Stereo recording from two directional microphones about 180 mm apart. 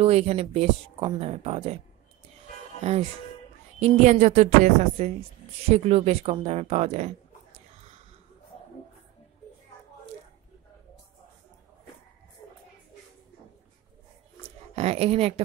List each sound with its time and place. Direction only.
0.0 s speech: 35° right (ahead or behind)
2.8 s speech: 35° right (ahead or behind)
14.8 s speech: 35° right (ahead or behind)